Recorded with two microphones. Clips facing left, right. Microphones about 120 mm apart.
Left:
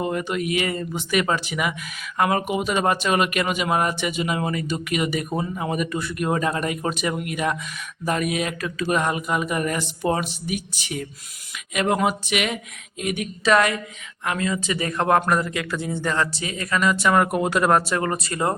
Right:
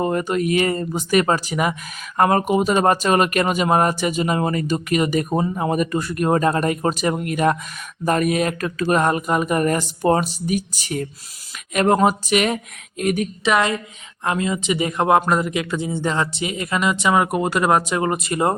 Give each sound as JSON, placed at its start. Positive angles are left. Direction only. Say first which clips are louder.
{"t": 0.0, "sound": "speech", "louder": "right 4 dB", "side_deg": -40}
{"t": 13.4, "sound": "speech", "louder": "left 2 dB", "side_deg": -20}
{"t": 17.2, "sound": "speech", "louder": "right 1 dB", "side_deg": -5}